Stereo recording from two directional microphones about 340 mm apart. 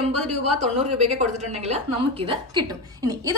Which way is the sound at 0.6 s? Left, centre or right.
Centre.